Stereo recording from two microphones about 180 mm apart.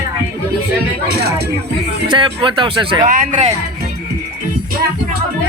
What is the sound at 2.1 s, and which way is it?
Speech, 25° right (ahead or behind).